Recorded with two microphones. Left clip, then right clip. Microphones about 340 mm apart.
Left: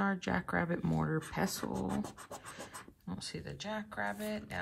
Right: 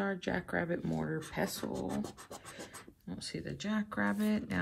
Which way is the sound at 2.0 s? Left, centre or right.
Centre.